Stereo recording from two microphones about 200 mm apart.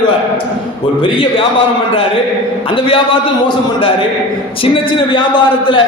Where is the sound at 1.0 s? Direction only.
25° left (ahead or behind).